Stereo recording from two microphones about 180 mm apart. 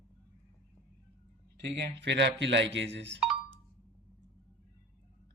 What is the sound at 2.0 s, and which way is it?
Speech, 75° right (ahead or behind).